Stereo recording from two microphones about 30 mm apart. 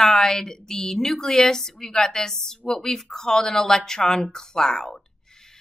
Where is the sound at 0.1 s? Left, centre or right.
Centre.